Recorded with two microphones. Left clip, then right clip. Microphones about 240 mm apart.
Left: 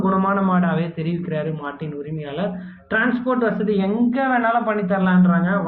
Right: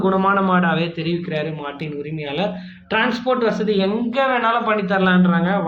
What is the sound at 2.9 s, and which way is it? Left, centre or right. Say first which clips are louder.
Speech: right 1 dB; centre.